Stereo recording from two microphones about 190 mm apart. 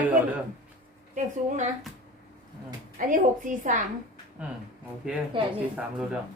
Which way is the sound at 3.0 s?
45° right (ahead or behind).